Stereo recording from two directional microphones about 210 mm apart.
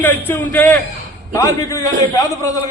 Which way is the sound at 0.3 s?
10° left (ahead or behind).